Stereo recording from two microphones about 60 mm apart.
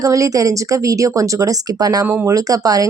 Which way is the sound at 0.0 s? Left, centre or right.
Right.